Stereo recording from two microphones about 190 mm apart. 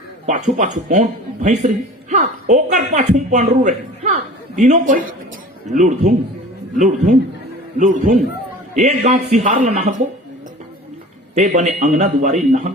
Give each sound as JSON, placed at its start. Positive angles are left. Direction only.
{"t": 0.3, "sound": "a man's voice", "side_deg": -40}
{"t": 11.3, "sound": "a man's voice", "side_deg": -40}